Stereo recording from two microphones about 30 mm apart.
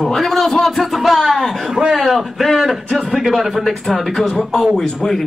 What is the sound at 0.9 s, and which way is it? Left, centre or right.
Speech, centre.